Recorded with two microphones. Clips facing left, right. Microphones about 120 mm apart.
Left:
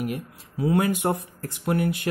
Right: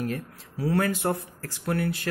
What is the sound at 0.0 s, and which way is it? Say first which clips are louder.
A man's voice: left 1 dB; 20° left (ahead or behind).